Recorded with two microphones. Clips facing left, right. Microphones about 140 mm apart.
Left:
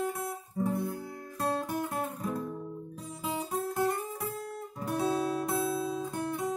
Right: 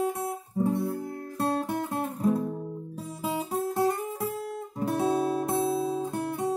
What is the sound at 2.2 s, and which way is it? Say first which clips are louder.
Music: right 9 dB; 30° right (ahead or behind).